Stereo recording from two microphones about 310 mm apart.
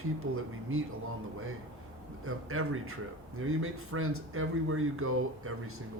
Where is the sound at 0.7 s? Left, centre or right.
Right.